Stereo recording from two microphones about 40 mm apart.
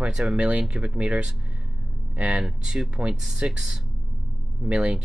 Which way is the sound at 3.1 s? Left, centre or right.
Centre.